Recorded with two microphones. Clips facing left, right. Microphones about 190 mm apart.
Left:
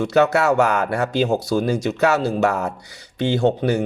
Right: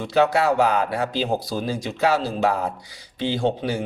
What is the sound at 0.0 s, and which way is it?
Speech, 70° left (ahead or behind).